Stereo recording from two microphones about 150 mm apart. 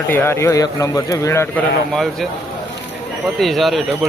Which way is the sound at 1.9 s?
Centre (ahead or behind).